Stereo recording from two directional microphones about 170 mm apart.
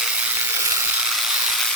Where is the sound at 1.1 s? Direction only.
5° right (ahead or behind).